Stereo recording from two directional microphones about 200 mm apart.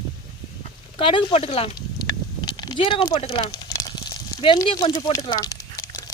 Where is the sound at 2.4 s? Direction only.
20° left (ahead or behind).